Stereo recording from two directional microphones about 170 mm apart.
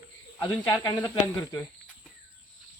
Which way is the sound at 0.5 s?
15° left (ahead or behind).